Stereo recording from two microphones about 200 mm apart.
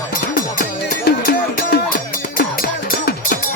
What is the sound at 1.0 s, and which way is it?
Music, 50° left (ahead or behind).